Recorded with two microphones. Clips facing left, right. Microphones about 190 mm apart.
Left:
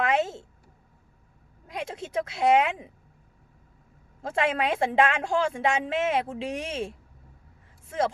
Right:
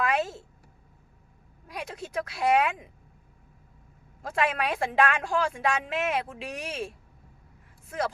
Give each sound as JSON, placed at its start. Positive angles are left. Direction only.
{"t": 0.0, "sound": "a woman's voice", "side_deg": 25}
{"t": 1.6, "sound": "a woman's voice", "side_deg": 25}
{"t": 4.2, "sound": "a woman's voice", "side_deg": 25}